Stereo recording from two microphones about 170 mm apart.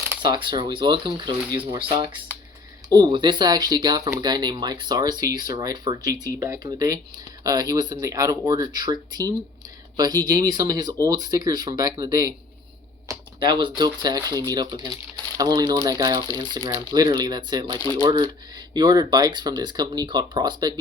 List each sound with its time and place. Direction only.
0.2 s speech: 30° right (ahead or behind)
17.7 s speech: 20° left (ahead or behind)
18.0 s speech: 25° right (ahead or behind)